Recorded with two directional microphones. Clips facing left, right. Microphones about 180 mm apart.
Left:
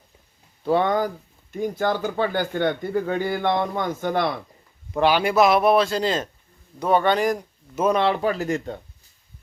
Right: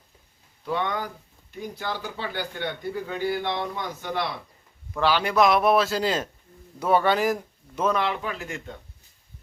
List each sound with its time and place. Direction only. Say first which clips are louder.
0.6 s speech: left 8 dB; 35° left (ahead or behind)
1.5 s speech: left 9 dB; 50° left (ahead or behind)
4.9 s speech: left 3 dB; 15° left (ahead or behind); by 7.9 s 5° right (ahead or behind)
7.9 s speech: left 6 dB; 35° left (ahead or behind)